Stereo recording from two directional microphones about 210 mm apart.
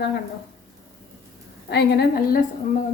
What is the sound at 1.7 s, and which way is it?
Speech, 50° left (ahead or behind).